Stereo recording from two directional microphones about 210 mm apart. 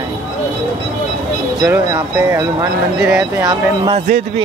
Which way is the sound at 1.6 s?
15° right (ahead or behind).